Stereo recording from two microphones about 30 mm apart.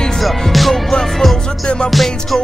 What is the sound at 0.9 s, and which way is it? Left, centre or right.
Music, centre.